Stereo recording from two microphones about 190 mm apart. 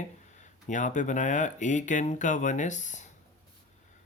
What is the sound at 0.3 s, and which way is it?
Speech, 40° left (ahead or behind).